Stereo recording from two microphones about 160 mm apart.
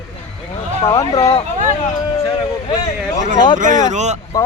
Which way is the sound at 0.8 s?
20° left (ahead or behind).